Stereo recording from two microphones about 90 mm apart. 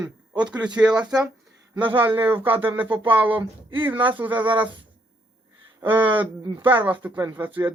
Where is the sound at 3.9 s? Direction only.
65° right (ahead or behind).